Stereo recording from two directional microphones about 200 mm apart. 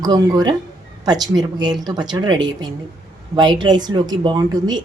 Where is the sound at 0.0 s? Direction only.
20° right (ahead or behind).